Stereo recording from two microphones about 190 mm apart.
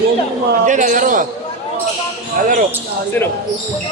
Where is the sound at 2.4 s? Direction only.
45° right (ahead or behind).